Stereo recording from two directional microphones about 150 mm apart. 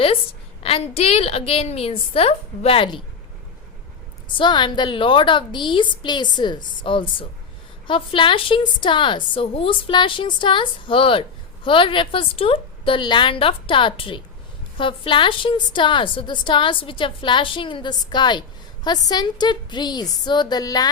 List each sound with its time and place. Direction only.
0.6 s a woman's voice: 40° left (ahead or behind)
4.3 s a woman's voice: 30° left (ahead or behind)